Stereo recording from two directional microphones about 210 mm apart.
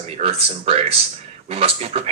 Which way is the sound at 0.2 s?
30° right (ahead or behind).